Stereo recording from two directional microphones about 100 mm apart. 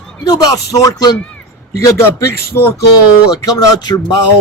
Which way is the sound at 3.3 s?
40° left (ahead or behind).